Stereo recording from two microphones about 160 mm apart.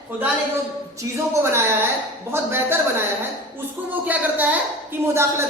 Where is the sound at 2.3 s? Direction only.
15° right (ahead or behind).